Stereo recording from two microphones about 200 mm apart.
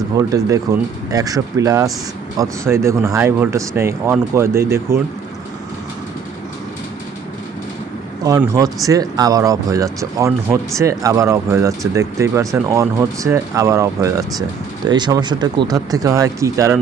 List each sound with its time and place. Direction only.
0.2 s speech: 15° right (ahead or behind)
8.2 s speech: 15° right (ahead or behind)